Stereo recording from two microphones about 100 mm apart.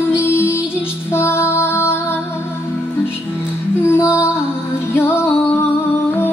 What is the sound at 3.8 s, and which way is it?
Music, 30° left (ahead or behind).